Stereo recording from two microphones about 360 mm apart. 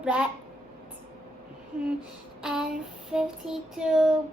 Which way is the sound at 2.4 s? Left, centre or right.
Centre.